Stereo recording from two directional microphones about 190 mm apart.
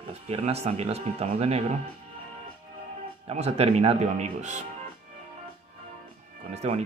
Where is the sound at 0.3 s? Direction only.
35° right (ahead or behind).